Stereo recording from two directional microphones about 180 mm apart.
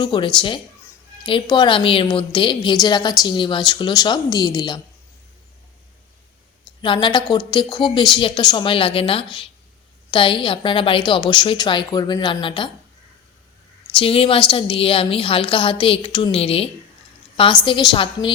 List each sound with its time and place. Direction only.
0.0 s a woman's voice: 25° left (ahead or behind)
6.8 s a woman's voice: 25° left (ahead or behind)
13.9 s a woman's voice: 30° left (ahead or behind)